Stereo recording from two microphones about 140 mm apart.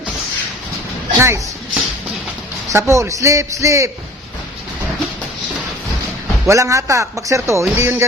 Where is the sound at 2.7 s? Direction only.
20° right (ahead or behind).